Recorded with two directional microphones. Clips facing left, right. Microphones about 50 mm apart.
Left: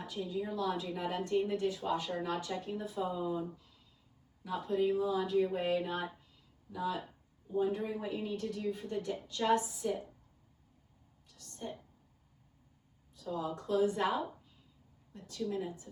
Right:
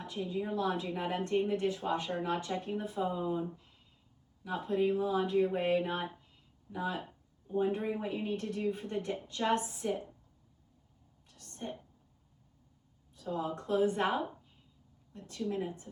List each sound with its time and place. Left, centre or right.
0.0 s a woman's voice: right
4.4 s a woman's voice: right
11.3 s a sound: right
13.1 s a woman's voice: right